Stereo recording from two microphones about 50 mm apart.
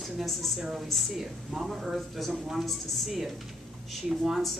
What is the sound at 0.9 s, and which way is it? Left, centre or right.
A woman's voice, centre.